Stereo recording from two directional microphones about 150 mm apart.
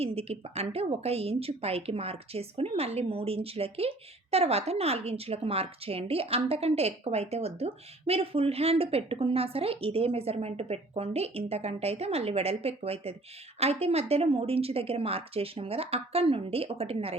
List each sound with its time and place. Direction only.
0.0 s speech: 40° right (ahead or behind)